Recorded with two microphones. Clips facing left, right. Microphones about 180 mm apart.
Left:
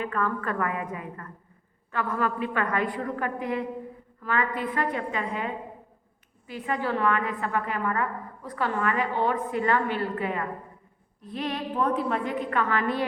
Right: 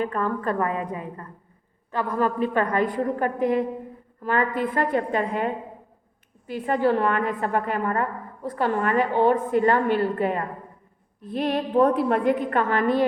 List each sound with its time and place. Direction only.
0.0 s a woman's voice: 35° right (ahead or behind)
11.3 s a woman's voice: 55° right (ahead or behind)